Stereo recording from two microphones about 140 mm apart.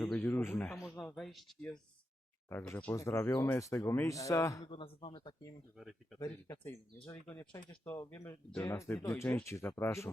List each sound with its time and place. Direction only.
0.0 s a man's voice: 5° left (ahead or behind)
0.3 s speech: 15° left (ahead or behind); by 1.5 s centre (ahead or behind)
2.5 s speech: 15° left (ahead or behind)
4.6 s speech: 35° left (ahead or behind)
5.7 s speech: centre (ahead or behind)
6.1 s speech: 30° left (ahead or behind)